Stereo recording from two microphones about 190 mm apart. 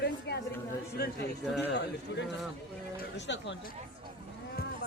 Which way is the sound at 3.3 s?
70° left (ahead or behind).